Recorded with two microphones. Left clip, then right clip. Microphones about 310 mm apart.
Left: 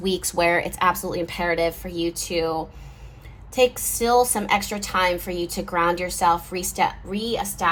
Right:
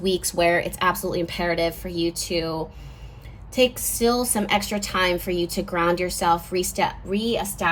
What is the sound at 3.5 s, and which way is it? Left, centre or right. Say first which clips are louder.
A woman's voice: left 1 dB; centre.